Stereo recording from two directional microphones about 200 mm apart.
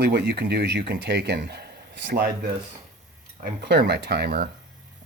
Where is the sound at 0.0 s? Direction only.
55° right (ahead or behind).